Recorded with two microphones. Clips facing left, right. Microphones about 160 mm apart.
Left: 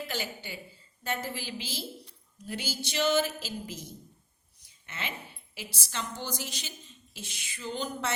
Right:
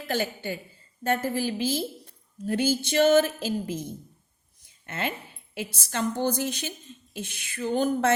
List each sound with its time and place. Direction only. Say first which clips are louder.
0.1 s a woman's voice: right 8 dB; 50° right (ahead or behind)